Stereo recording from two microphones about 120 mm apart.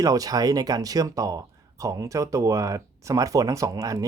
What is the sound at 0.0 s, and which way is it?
Speech, 30° right (ahead or behind).